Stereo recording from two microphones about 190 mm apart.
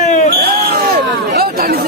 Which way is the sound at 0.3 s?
55° right (ahead or behind).